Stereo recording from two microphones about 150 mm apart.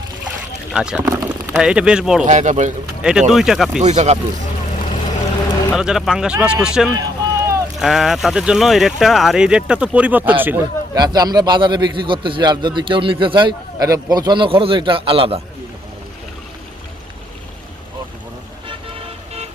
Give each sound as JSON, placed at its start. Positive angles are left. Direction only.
{"t": 0.7, "sound": "speech", "side_deg": -5}
{"t": 1.1, "sound": "speech", "side_deg": -20}
{"t": 1.5, "sound": "speech", "side_deg": -5}
{"t": 2.2, "sound": "speech", "side_deg": -55}
{"t": 3.0, "sound": "speech", "side_deg": -5}
{"t": 3.8, "sound": "speech", "side_deg": -50}
{"t": 5.7, "sound": "speech", "side_deg": -5}
{"t": 6.9, "sound": "run", "side_deg": -20}
{"t": 7.8, "sound": "speech", "side_deg": 0}
{"t": 10.9, "sound": "a man's voice", "side_deg": -25}